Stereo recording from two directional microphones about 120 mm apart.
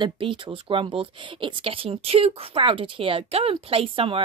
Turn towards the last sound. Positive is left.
turn(degrees=-50)  # may be behind; listen again after turning